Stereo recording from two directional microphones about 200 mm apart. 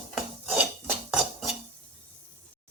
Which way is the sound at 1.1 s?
Centre (ahead or behind).